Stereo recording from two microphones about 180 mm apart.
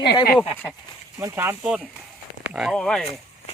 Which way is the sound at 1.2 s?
15° right (ahead or behind).